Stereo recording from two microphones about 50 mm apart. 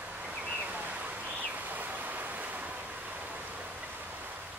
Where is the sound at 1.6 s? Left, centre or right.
Right.